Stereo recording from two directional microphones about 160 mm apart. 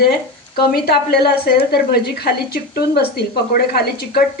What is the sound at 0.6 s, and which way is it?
A woman's voice, 80° left.